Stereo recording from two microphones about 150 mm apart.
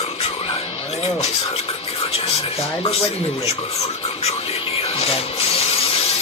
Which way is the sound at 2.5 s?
45° left (ahead or behind).